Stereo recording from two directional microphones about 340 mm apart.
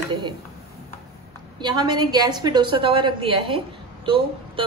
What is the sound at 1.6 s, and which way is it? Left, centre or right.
A woman's voice, centre.